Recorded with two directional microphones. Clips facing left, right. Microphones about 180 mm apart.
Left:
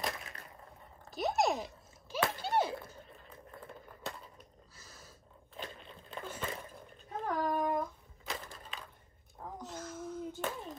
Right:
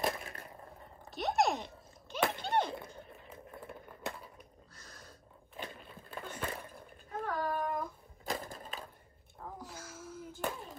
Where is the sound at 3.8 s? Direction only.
5° right (ahead or behind).